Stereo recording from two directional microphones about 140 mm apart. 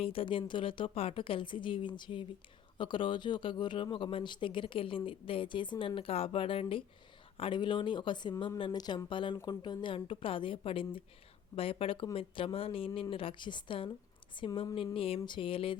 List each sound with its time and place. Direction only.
0.0 s speech: 40° left (ahead or behind)